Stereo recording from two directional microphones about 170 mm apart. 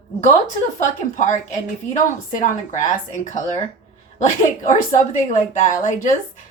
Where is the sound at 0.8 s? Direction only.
45° left (ahead or behind).